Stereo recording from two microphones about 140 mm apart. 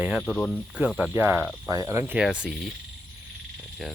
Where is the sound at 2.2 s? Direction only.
5° right (ahead or behind).